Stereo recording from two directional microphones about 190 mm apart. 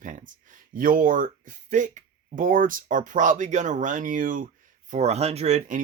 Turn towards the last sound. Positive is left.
turn(degrees=-40)  # may be behind; listen again after turning